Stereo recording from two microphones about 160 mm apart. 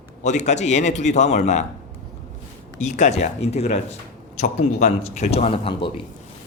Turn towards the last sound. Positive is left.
turn(degrees=35)  # may be behind; listen again after turning